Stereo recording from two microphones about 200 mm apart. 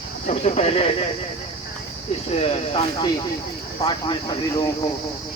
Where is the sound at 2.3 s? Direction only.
30° left (ahead or behind).